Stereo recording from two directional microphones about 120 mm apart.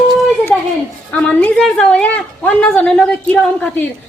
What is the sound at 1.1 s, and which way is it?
A woman's voice, 15° left (ahead or behind).